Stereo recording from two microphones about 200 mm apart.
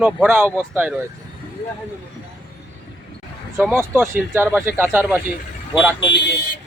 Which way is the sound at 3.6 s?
10° right (ahead or behind).